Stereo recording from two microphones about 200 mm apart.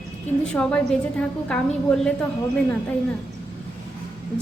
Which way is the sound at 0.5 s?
5° left (ahead or behind).